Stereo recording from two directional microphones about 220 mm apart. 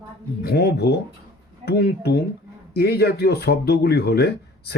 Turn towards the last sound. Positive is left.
turn(degrees=50)  # may be behind; listen again after turning